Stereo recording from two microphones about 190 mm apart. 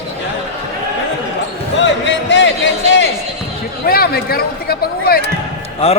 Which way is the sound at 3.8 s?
50° left (ahead or behind).